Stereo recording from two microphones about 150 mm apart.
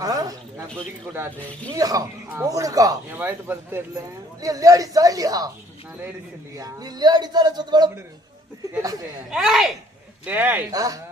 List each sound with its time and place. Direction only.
0.0 s speech: 25° right (ahead or behind)
1.7 s a man's voice: 25° right (ahead or behind)
6.6 s a man's voice: 25° right (ahead or behind)
9.3 s speech: 5° right (ahead or behind)
10.7 s a man's voice: 25° right (ahead or behind)